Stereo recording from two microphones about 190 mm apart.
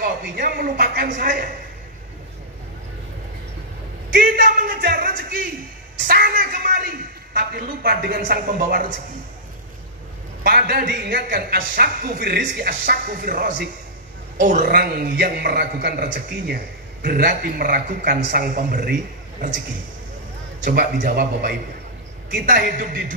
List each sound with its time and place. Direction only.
0.0 s a man's voice: 50° right (ahead or behind)
4.1 s a man's voice: 50° right (ahead or behind)
10.4 s a man's voice: 50° right (ahead or behind)
20.6 s a man's voice: 50° right (ahead or behind)